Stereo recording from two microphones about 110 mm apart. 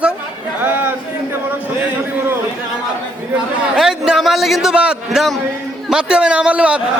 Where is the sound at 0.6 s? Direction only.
15° right (ahead or behind).